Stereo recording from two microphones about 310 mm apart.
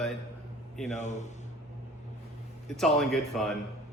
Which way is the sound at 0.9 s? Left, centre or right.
Left.